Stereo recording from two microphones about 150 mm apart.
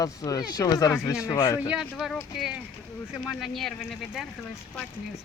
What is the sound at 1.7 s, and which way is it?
Speech, 5° right (ahead or behind).